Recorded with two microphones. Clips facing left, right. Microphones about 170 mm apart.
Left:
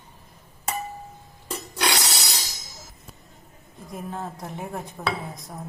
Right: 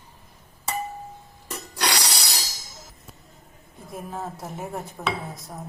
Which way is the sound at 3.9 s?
Centre (ahead or behind).